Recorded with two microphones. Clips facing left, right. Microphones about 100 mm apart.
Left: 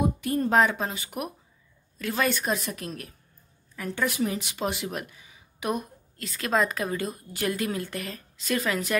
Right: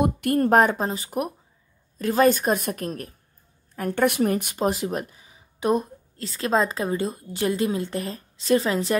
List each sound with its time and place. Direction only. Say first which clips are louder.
0.0 s a woman's voice: right 5 dB; 65° right (ahead or behind); by 3.2 s 45° right (ahead or behind)
3.7 s speech: right 7 dB; 55° right (ahead or behind); by 8.9 s 30° right (ahead or behind)